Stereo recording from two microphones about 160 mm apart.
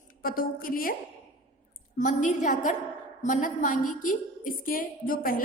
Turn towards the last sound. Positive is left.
turn(degrees=60)  # may be behind; listen again after turning